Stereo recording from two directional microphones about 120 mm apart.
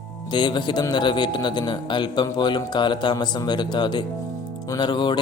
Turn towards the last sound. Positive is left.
turn(degrees=40)  # may be behind; listen again after turning